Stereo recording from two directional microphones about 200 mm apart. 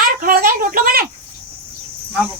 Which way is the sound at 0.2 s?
45° right (ahead or behind).